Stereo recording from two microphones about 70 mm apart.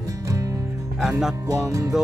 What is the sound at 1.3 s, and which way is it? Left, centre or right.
Music, right.